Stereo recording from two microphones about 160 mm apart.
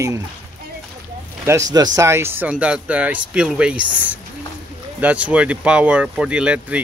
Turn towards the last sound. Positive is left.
turn(degrees=-10)  # may be behind; listen again after turning